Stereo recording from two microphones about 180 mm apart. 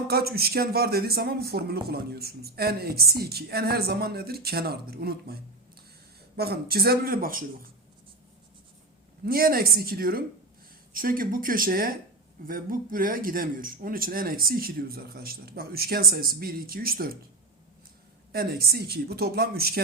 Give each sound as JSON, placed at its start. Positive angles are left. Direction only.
{"t": 0.1, "sound": "speech", "side_deg": -60}
{"t": 9.2, "sound": "speech", "side_deg": -55}
{"t": 18.3, "sound": "speech", "side_deg": -60}